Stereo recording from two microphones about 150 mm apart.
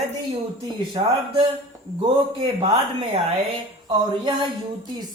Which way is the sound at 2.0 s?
35° right (ahead or behind).